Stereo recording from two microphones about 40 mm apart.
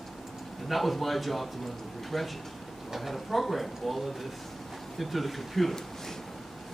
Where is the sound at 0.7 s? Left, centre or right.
Centre.